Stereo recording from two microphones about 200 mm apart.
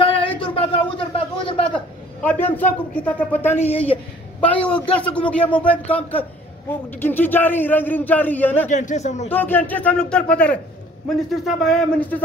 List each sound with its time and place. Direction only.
0.0 s a sound: 25° left (ahead or behind)
2.2 s a man's voice: 10° left (ahead or behind)
3.7 s a woman's voice: 30° left (ahead or behind)
4.4 s a man's voice: 5° left (ahead or behind)
6.7 s a man's voice: 10° left (ahead or behind)
8.6 s a man's voice: 35° left (ahead or behind)
9.3 s a man's voice: 10° left (ahead or behind)